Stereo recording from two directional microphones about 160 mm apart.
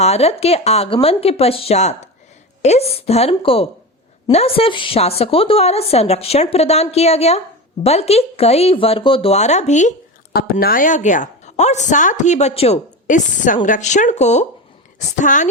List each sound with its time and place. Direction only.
0.0 s speech: 40° left (ahead or behind)
10.3 s a woman's voice: 70° left (ahead or behind); by 15.4 s 50° left (ahead or behind)